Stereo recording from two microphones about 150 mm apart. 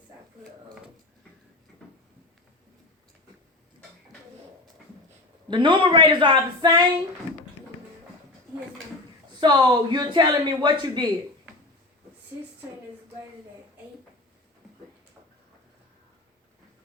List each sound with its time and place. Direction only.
1.8 s a sound: 5° left (ahead or behind)
5.5 s speech: 30° right (ahead or behind)
9.4 s speech: 30° right (ahead or behind)